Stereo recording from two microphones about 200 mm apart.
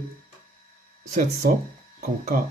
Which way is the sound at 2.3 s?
40° right (ahead or behind).